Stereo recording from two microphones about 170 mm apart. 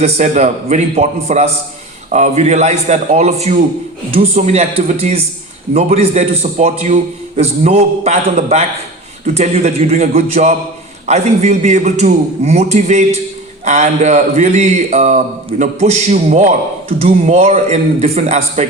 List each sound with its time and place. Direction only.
0.0 s a man's voice: 40° right (ahead or behind)